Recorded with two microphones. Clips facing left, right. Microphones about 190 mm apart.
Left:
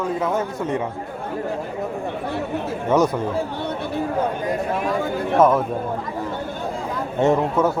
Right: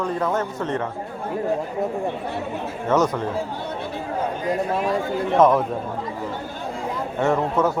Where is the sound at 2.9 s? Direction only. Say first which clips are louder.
Left 2 dB; 10° left (ahead or behind).